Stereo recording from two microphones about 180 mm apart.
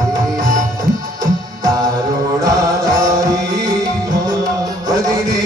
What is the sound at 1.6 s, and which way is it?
Music, 20° right (ahead or behind).